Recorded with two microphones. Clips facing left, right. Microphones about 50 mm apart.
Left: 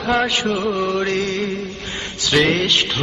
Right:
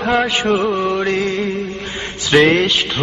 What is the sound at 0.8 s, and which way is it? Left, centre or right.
Music, centre.